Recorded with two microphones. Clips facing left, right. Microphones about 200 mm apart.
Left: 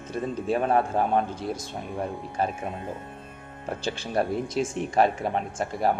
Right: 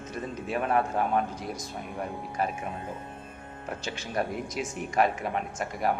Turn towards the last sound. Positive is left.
turn(degrees=30)  # may be behind; listen again after turning